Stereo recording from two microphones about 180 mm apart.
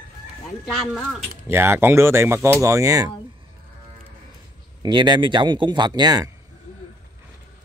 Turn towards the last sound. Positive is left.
turn(degrees=-20)  # may be behind; listen again after turning